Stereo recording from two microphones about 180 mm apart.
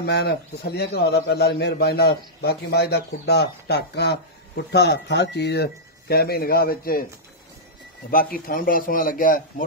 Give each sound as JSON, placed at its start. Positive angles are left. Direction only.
{"t": 0.0, "sound": "a man's voice", "side_deg": 65}
{"t": 8.1, "sound": "speech", "side_deg": 55}